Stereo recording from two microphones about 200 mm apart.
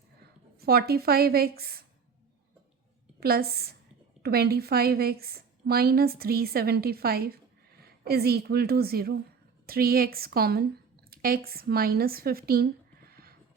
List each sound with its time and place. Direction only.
0.6 s a woman's voice: 50° right (ahead or behind)
3.2 s a woman's voice: 50° right (ahead or behind)